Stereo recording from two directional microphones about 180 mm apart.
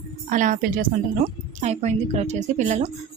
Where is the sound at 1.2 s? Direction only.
35° right (ahead or behind).